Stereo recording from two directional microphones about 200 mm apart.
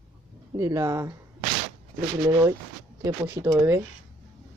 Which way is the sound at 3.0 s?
15° right (ahead or behind).